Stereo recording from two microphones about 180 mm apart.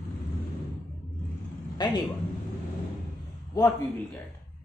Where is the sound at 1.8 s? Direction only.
25° left (ahead or behind).